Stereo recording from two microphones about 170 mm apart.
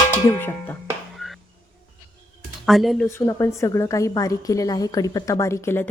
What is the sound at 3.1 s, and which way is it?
A woman's voice, 15° left (ahead or behind).